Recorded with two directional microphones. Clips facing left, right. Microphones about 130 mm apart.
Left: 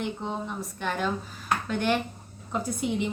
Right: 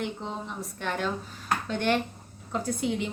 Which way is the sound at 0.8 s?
Centre (ahead or behind).